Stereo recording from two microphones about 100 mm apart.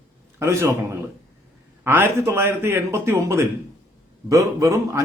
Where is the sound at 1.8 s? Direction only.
20° right (ahead or behind).